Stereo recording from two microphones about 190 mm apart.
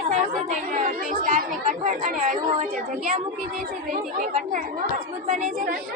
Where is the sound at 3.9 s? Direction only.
40° right (ahead or behind).